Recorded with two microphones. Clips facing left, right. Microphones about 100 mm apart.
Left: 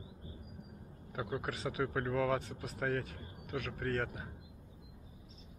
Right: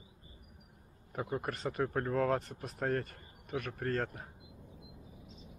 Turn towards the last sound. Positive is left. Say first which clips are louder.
# right 1 dB
turn(degrees=0)  # may be behind; listen again after turning